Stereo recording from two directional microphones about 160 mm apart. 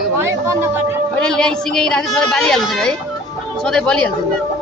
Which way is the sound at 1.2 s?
5° left (ahead or behind).